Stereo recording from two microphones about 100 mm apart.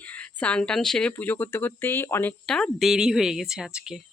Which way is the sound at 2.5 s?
5° left (ahead or behind).